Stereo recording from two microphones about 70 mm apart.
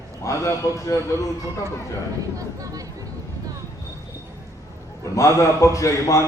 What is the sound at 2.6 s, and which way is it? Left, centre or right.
Speech, right.